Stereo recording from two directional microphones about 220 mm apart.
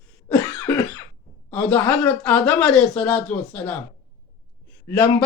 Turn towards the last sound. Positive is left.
turn(degrees=5)  # may be behind; listen again after turning